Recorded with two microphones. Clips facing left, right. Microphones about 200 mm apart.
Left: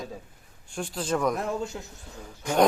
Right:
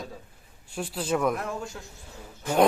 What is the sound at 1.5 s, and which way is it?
Speech, 20° left (ahead or behind).